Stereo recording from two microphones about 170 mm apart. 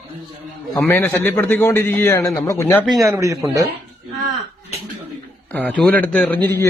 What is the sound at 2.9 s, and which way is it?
Speech, 20° right (ahead or behind).